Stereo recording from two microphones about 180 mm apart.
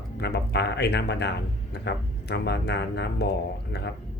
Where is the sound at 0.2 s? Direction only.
65° left (ahead or behind).